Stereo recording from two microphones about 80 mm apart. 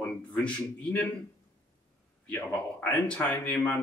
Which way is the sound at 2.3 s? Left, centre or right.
Left.